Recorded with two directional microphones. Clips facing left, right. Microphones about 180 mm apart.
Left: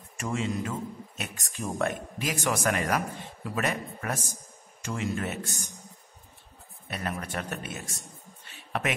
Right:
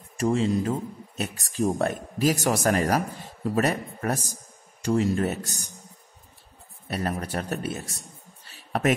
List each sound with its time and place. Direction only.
0.2 s speech: 35° right (ahead or behind)
6.9 s speech: 35° right (ahead or behind)
8.5 s a sound: 40° right (ahead or behind)